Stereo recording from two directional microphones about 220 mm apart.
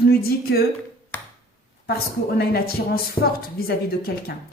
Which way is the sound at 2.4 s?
45° left (ahead or behind).